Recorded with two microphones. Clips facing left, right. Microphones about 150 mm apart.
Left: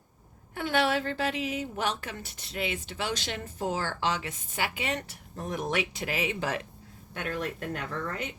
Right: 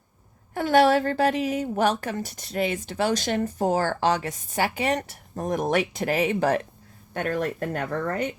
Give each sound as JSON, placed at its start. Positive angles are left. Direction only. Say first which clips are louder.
{"t": 0.5, "sound": "a woman's voice", "louder": "right 8 dB", "side_deg": -40}